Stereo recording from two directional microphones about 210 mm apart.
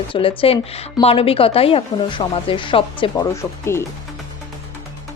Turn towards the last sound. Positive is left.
turn(degrees=10)  # may be behind; listen again after turning